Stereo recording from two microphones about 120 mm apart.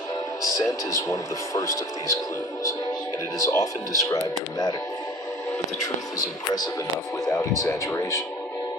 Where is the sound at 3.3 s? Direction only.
25° left (ahead or behind).